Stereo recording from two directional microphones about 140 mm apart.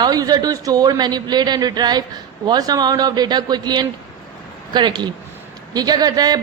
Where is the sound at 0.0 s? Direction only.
25° right (ahead or behind).